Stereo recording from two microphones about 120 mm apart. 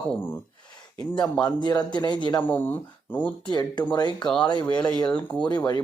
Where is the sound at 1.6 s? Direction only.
35° left (ahead or behind).